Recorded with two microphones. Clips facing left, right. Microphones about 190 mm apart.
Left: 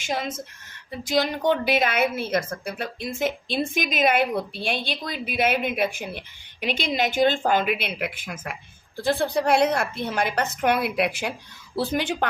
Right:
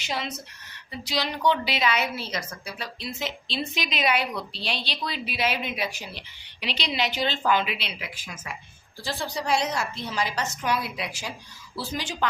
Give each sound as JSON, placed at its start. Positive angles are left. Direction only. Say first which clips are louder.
{"t": 0.0, "sound": "a woman's voice", "louder": "left 4 dB", "side_deg": 50}